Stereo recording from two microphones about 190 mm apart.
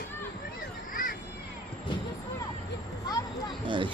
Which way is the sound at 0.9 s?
45° left (ahead or behind).